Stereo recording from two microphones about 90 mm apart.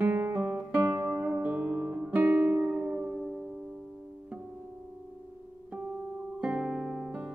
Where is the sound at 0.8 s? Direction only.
25° right (ahead or behind); by 3.3 s 10° right (ahead or behind).